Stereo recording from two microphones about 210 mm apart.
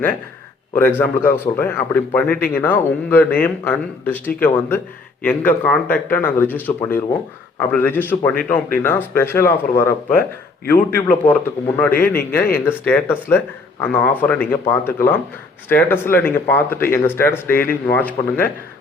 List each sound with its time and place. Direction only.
0.7 s speech: 10° left (ahead or behind)
15.7 s speech: 10° left (ahead or behind)